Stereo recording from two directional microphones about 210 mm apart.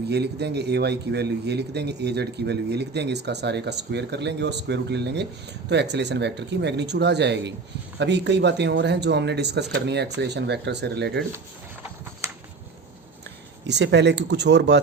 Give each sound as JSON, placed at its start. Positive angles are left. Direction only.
{"t": 0.1, "sound": "a man's voice", "side_deg": -50}
{"t": 13.7, "sound": "speech", "side_deg": -55}